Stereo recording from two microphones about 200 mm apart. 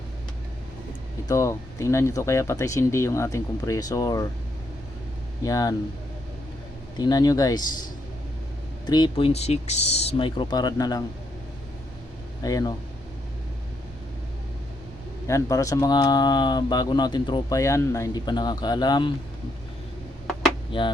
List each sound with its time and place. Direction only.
1.3 s speech: 15° left (ahead or behind)
5.4 s speech: 15° left (ahead or behind)
7.0 s speech: 20° left (ahead or behind)
8.9 s speech: 25° left (ahead or behind)
12.4 s speech: 20° left (ahead or behind)
15.3 s speech: 15° left (ahead or behind)
20.7 s speech: 25° left (ahead or behind)